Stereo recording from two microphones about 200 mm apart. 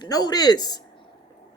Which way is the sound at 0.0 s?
20° left (ahead or behind).